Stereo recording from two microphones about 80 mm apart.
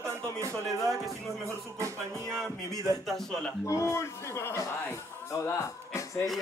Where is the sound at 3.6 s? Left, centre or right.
Left.